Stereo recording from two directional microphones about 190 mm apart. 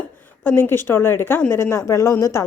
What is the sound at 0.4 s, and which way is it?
A woman's voice, 10° left (ahead or behind).